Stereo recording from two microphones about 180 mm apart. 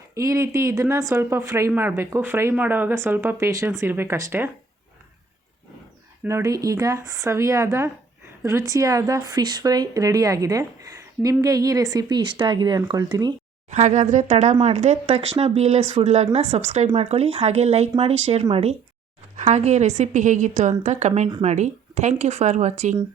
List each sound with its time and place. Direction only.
0.1 s speech: 15° right (ahead or behind)
6.2 s speech: 15° right (ahead or behind)
13.7 s speech: 40° right (ahead or behind)